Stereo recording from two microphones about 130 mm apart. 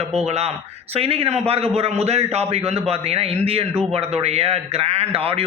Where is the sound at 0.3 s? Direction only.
55° right (ahead or behind).